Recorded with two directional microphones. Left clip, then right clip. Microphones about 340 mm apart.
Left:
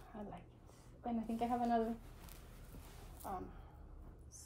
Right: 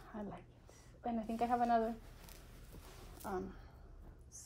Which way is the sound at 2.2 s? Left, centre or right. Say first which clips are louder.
Even; centre.